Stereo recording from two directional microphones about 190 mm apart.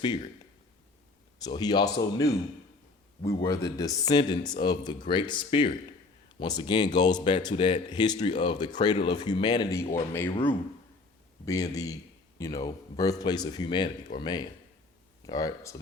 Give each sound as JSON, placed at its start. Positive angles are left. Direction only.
{"t": 0.0, "sound": "speech", "side_deg": 25}
{"t": 1.5, "sound": "speech", "side_deg": 20}
{"t": 3.2, "sound": "speech", "side_deg": 20}
{"t": 11.4, "sound": "speech", "side_deg": 20}